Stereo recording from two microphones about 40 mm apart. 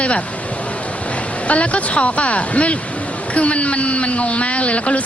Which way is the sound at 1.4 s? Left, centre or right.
Left.